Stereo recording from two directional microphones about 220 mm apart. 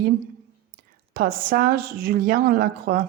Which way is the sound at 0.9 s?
40° right (ahead or behind).